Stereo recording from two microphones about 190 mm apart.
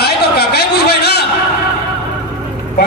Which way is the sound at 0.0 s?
60° left (ahead or behind).